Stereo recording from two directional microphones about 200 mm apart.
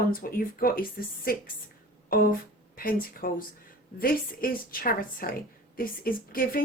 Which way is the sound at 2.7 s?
45° left (ahead or behind).